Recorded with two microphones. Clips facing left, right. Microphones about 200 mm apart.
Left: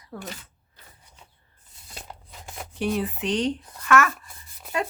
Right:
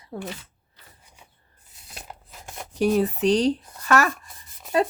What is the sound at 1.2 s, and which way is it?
Rub, 10° right (ahead or behind).